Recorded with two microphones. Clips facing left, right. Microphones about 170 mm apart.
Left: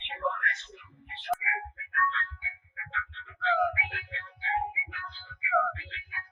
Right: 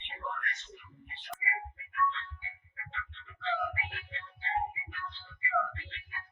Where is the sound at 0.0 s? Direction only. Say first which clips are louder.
Left 7 dB; 90° left.